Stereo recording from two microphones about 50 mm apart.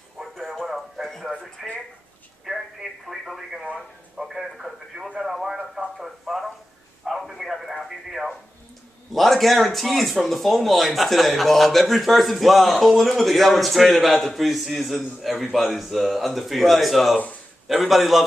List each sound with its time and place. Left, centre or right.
0.2 s radio: centre
1.6 s speech: centre
2.4 s telephone: centre
4.2 s a sound: centre
5.2 s radio: centre
9.1 s speech: centre